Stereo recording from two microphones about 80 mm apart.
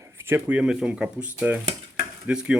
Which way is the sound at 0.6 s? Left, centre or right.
Centre.